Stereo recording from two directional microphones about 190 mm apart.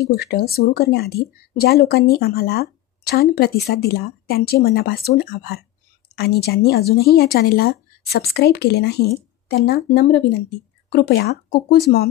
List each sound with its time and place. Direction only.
0.1 s speech: 55° left (ahead or behind)